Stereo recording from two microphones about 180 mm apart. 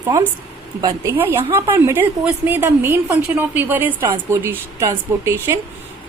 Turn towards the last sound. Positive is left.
turn(degrees=-15)  # may be behind; listen again after turning